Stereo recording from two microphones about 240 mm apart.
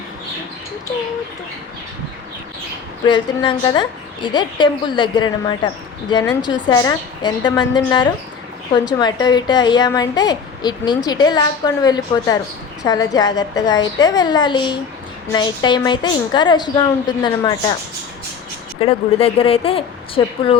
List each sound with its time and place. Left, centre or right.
3.1 s a woman's voice: centre
18.8 s a woman's voice: left